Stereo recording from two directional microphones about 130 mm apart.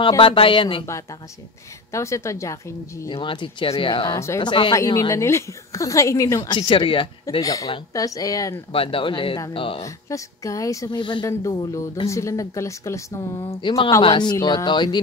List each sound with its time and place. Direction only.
0.2 s speech: 40° left (ahead or behind)
1.9 s a woman's voice: 25° left (ahead or behind)
3.1 s speech: 40° left (ahead or behind)
4.1 s a woman's voice: 20° left (ahead or behind)
4.4 s a woman's voice: 35° left (ahead or behind)
6.5 s speech: 40° left (ahead or behind)
7.2 s a woman's voice: 30° left (ahead or behind)
8.7 s speech: 45° left (ahead or behind)
10.0 s a woman's voice: 25° left (ahead or behind)
11.0 s a woman's voice: 35° left (ahead or behind)
13.4 s speech: 40° left (ahead or behind)